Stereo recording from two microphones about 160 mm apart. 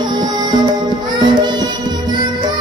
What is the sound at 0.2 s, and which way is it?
Music, 25° right (ahead or behind).